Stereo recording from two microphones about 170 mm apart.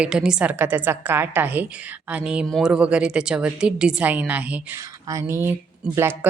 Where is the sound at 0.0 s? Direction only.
5° right (ahead or behind).